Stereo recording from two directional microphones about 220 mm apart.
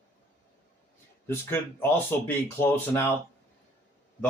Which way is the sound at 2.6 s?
40° left (ahead or behind).